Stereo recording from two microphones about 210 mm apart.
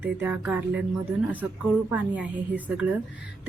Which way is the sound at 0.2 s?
10° right (ahead or behind).